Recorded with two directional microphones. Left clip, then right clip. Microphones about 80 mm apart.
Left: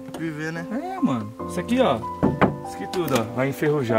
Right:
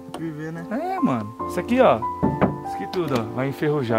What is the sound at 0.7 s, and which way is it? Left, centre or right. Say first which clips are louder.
Speech: right 4 dB; right.